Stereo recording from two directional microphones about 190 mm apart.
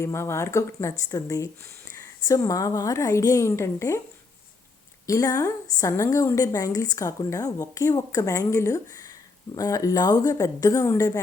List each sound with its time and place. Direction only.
0.0 s a woman's voice: 15° left (ahead or behind)
5.0 s a woman's voice: 15° left (ahead or behind)